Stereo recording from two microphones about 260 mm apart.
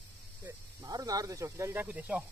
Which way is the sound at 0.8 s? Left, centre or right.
Centre.